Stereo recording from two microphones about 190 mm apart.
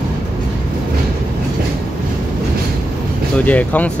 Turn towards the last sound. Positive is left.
turn(degrees=10)  # may be behind; listen again after turning